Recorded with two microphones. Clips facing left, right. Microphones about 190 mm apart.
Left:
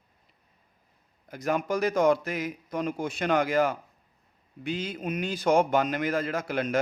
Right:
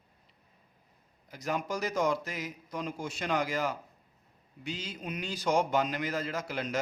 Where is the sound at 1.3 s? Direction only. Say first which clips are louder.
Left 6 dB; 55° left (ahead or behind).